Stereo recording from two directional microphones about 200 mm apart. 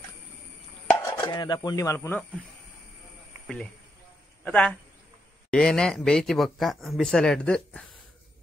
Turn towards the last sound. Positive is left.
turn(degrees=5)  # may be behind; listen again after turning